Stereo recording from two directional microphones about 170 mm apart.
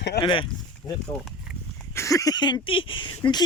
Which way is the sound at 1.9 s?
20° left (ahead or behind).